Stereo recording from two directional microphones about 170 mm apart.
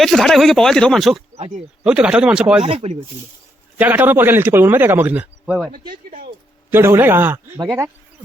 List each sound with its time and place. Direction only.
0.0 s speech: centre (ahead or behind)
2.6 s speech: 35° right (ahead or behind)
3.8 s a man's voice: 10° right (ahead or behind)
5.9 s speech: 55° right (ahead or behind)
6.7 s a man's voice: 15° right (ahead or behind)